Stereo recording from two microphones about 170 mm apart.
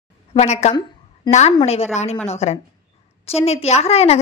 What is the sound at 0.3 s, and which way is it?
A woman's voice, 40° left (ahead or behind).